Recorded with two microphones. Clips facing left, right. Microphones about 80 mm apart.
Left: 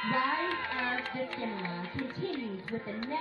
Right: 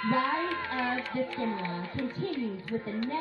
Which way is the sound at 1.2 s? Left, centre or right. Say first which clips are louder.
Right 4 dB; right.